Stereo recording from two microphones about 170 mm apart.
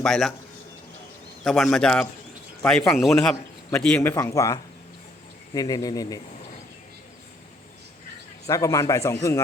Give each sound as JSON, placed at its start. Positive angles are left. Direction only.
{"t": 0.0, "sound": "speech", "side_deg": 0}
{"t": 1.5, "sound": "a man's voice", "side_deg": 0}
{"t": 8.4, "sound": "a man's voice", "side_deg": 20}